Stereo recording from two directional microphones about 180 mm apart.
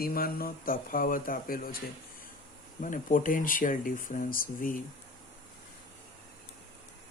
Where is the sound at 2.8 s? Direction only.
45° left (ahead or behind).